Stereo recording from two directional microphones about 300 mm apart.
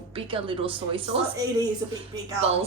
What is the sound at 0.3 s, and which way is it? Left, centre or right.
A woman's voice, centre.